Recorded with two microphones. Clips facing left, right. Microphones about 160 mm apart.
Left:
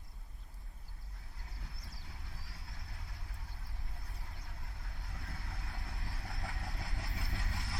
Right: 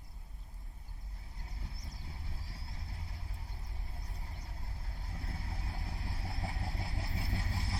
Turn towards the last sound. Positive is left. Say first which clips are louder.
# right 4 dB
turn(degrees=-35)  # may be behind; listen again after turning